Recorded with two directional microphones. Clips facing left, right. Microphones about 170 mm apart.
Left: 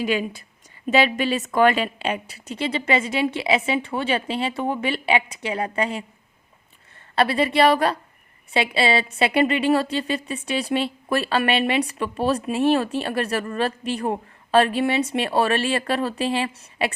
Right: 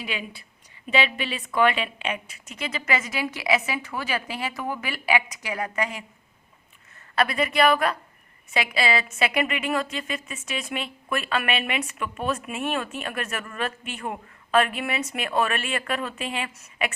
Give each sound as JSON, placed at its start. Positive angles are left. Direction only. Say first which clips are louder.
{"t": 0.0, "sound": "a woman's voice", "louder": "left 10 dB", "side_deg": 45}
{"t": 7.2, "sound": "a woman's voice", "louder": "left 4 dB", "side_deg": 30}